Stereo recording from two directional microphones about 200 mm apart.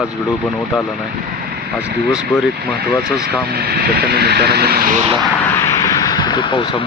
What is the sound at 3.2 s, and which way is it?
Speech, 50° right (ahead or behind).